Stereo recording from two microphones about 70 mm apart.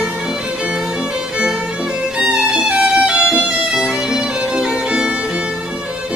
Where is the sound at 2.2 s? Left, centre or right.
Centre.